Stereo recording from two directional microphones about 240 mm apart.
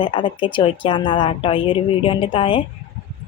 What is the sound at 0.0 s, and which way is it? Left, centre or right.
A woman's voice, left.